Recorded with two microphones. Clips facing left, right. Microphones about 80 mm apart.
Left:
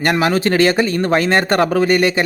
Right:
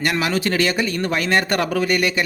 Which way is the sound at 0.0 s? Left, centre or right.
Left.